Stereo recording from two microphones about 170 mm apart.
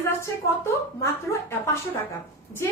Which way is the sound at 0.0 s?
15° left (ahead or behind).